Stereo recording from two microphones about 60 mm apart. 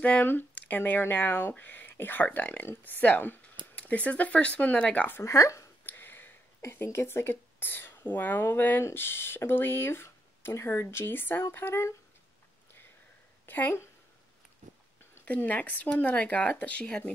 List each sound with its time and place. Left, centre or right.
0.0 s speech: left
5.2 s speech: left
5.9 s a sound: left
6.6 s speech: left
13.5 s a woman's voice: left
15.2 s speech: left